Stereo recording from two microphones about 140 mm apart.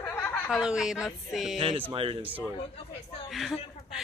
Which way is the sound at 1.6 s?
40° right (ahead or behind).